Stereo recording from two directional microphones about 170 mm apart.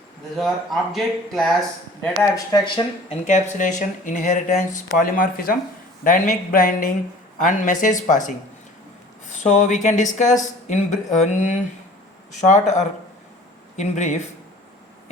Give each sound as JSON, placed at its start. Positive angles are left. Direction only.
{"t": 0.3, "sound": "speech", "side_deg": 0}
{"t": 2.3, "sound": "speech", "side_deg": 25}
{"t": 3.2, "sound": "speech", "side_deg": 45}
{"t": 4.9, "sound": "a sound", "side_deg": 55}
{"t": 7.3, "sound": "speech", "side_deg": 45}